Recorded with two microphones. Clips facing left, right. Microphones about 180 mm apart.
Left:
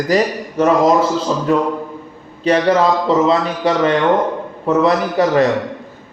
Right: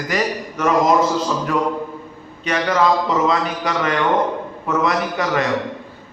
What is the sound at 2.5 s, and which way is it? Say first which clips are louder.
Speech: left 4 dB; 30° left (ahead or behind).